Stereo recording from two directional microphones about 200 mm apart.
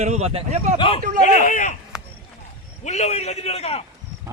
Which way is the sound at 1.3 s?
40° left (ahead or behind).